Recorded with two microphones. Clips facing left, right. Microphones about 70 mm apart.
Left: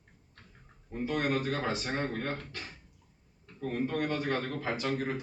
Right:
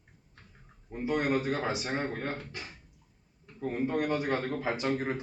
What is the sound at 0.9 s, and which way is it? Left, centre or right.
A man's voice, centre.